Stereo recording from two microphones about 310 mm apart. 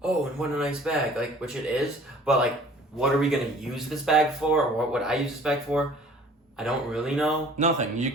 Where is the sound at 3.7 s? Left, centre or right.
Centre.